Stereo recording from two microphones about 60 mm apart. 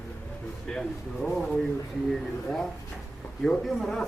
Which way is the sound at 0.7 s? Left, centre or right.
Centre.